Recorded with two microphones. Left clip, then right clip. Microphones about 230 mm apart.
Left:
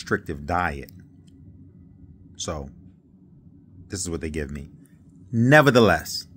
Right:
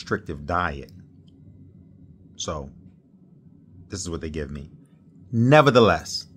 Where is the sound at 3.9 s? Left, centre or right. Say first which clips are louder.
Left 2 dB; centre.